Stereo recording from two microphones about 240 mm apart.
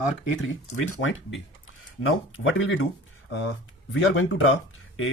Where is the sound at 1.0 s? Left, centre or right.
Left.